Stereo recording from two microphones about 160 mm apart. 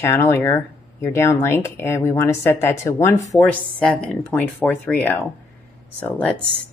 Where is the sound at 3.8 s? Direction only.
5° left (ahead or behind).